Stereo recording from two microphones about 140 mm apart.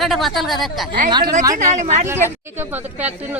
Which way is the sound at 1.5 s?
60° right (ahead or behind).